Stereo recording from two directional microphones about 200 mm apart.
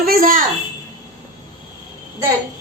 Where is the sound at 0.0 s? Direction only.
45° right (ahead or behind).